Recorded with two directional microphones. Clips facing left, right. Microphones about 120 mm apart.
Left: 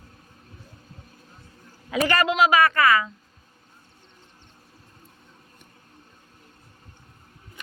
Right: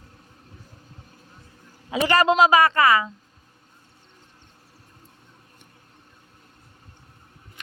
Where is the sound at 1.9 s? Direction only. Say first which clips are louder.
Right 3 dB; 25° right (ahead or behind).